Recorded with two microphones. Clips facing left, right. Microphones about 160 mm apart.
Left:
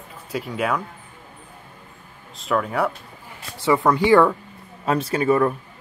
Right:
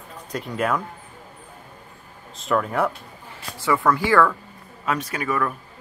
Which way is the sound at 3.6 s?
20° left (ahead or behind).